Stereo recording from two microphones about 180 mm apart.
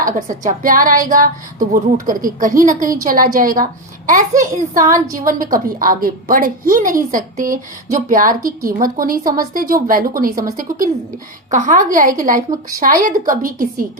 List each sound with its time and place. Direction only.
0.0 s a child's voice: 45° right (ahead or behind)
11.5 s a child's voice: 45° right (ahead or behind)